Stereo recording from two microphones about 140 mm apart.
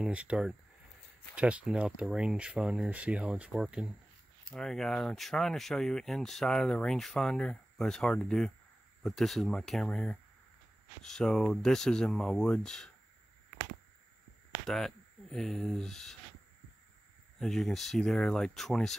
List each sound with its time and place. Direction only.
0.0 s speech: 10° right (ahead or behind)
14.7 s speech: centre (ahead or behind)
17.4 s speech: centre (ahead or behind)